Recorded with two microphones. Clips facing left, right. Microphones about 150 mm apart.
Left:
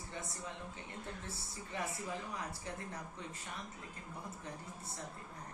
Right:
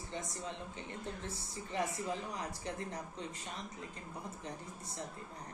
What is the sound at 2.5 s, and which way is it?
Speech, 20° right (ahead or behind).